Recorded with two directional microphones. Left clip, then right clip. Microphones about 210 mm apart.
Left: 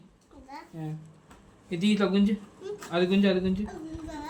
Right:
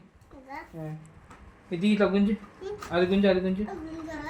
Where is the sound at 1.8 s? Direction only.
40° left (ahead or behind).